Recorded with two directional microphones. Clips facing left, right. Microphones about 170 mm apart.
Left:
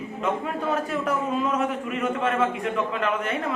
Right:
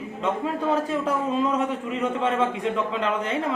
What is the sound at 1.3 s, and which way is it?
A man's voice, 25° right (ahead or behind).